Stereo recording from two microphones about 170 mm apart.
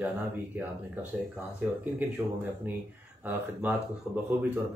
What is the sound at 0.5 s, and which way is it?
Speech, 10° right (ahead or behind).